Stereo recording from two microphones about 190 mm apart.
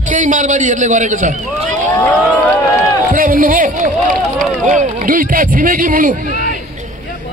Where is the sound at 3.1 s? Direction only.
45° right (ahead or behind).